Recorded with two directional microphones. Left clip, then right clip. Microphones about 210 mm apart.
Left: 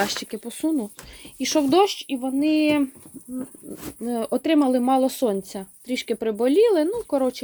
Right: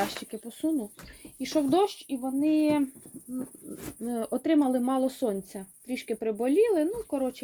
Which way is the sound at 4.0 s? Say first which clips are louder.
Left 6 dB; 20° left (ahead or behind).